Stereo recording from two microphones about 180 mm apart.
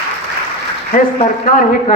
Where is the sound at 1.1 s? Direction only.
45° left (ahead or behind).